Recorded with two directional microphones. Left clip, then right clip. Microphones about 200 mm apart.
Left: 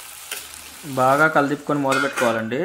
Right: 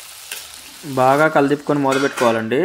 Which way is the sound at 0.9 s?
20° right (ahead or behind).